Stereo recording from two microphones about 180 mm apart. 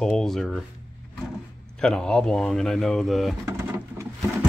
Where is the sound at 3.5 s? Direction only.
15° right (ahead or behind).